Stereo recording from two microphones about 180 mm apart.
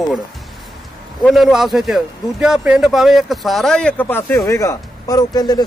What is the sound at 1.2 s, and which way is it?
Speech, centre (ahead or behind).